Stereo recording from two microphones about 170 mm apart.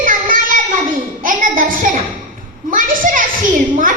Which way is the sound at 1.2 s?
50° right (ahead or behind).